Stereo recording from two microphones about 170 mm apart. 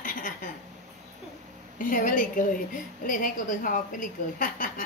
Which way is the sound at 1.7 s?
55° left (ahead or behind).